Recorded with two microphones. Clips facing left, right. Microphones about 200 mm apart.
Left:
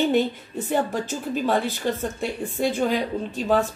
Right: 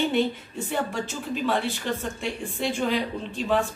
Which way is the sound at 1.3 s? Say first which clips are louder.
Left 2 dB; 40° left (ahead or behind).